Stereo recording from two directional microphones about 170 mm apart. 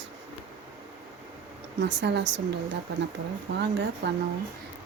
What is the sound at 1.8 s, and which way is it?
Speech, 90° right.